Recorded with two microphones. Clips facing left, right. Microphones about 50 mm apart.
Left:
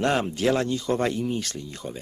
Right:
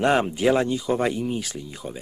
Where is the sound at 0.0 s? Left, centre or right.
Centre.